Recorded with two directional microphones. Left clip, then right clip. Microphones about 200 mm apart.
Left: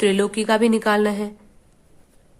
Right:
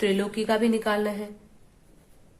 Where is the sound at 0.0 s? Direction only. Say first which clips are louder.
Left 6 dB; 35° left (ahead or behind).